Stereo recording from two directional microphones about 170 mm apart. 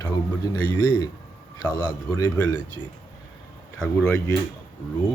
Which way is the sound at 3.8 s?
5° left (ahead or behind).